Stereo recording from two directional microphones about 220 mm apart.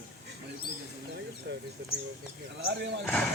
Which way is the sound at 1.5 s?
50° right (ahead or behind).